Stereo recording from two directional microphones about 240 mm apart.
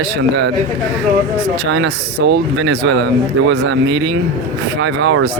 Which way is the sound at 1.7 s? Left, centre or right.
Right.